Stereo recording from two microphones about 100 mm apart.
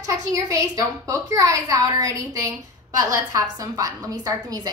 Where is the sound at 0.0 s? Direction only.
35° right (ahead or behind).